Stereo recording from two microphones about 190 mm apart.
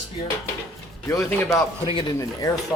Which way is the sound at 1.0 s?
15° left (ahead or behind).